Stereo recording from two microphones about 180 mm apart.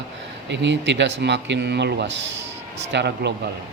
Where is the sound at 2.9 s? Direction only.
70° right (ahead or behind).